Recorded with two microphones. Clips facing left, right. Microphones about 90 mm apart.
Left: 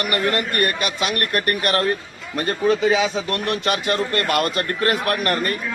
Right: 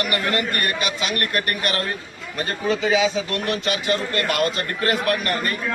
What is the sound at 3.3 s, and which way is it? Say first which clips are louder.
A man's voice: left 2 dB; 55° left (ahead or behind).